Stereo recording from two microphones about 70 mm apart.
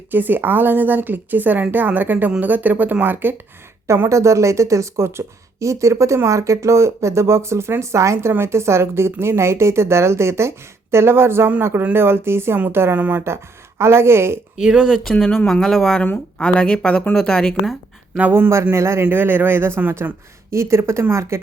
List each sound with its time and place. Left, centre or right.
0.1 s a woman's voice: right
3.8 s a woman's voice: right
12.5 s a woman's voice: right
13.2 s a woman's voice: right
14.6 s speech: centre
15.0 s a woman's voice: centre
18.2 s a woman's voice: right